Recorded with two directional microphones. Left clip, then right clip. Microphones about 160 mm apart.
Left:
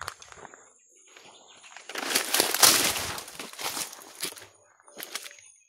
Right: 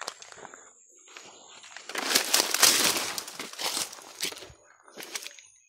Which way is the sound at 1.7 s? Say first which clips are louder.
Right 2 dB; 25° right (ahead or behind).